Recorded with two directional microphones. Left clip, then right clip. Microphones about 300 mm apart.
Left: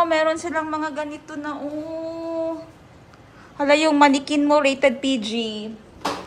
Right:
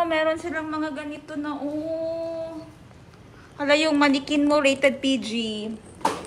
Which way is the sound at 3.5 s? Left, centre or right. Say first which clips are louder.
Left 4 dB; centre.